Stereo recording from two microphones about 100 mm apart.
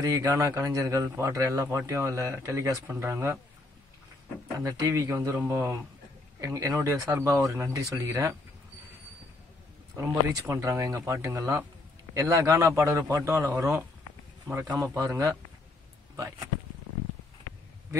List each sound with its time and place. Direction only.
0.0 s speech: 35° right (ahead or behind)
4.6 s speech: 35° right (ahead or behind)
9.9 s speech: 25° right (ahead or behind)